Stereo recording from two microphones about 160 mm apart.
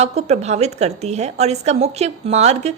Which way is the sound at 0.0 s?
45° right (ahead or behind).